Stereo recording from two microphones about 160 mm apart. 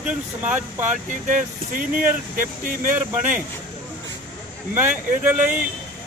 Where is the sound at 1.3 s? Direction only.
55° right (ahead or behind).